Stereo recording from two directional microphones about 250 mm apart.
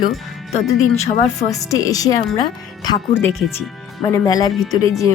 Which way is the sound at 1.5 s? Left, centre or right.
Centre.